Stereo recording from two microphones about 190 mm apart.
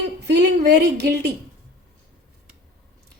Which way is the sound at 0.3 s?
60° right (ahead or behind).